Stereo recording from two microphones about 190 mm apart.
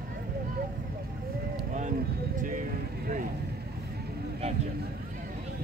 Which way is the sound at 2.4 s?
45° right (ahead or behind).